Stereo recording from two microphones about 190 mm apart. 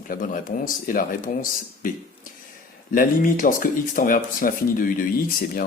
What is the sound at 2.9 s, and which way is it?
Speech, 45° left (ahead or behind).